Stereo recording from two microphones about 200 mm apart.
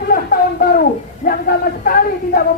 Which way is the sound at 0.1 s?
45° left (ahead or behind).